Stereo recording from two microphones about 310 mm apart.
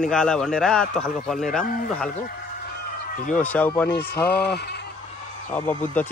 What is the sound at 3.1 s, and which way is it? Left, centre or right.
Speech, left.